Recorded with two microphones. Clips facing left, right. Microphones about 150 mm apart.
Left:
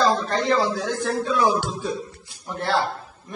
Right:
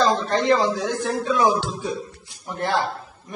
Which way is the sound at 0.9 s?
15° right (ahead or behind).